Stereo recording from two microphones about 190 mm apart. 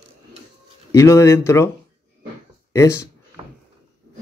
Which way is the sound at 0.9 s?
15° left (ahead or behind).